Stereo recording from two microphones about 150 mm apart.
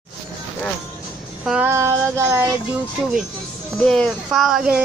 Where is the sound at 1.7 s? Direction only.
20° right (ahead or behind).